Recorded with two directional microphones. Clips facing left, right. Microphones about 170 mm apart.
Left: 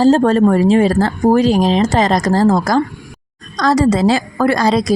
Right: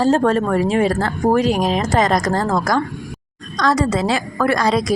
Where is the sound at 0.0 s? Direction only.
30° left (ahead or behind).